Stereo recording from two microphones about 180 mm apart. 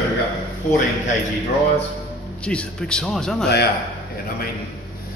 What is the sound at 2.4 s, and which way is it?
A man's voice, 5° left (ahead or behind).